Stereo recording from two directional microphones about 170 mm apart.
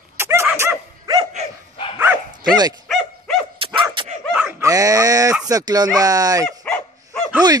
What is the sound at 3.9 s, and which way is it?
Dog, 30° right (ahead or behind).